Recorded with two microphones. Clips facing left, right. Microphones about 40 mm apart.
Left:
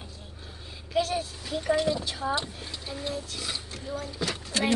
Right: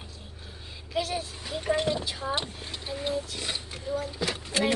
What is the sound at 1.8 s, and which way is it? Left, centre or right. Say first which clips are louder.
Speech: left 1 dB; right.